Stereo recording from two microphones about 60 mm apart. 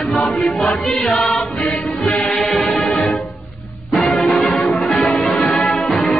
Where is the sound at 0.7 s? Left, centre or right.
Centre.